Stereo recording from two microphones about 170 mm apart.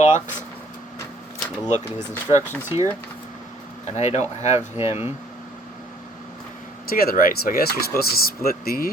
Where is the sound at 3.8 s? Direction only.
40° left (ahead or behind).